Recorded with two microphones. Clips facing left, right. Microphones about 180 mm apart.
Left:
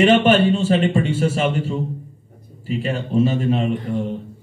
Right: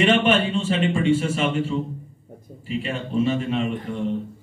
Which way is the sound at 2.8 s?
40° left (ahead or behind).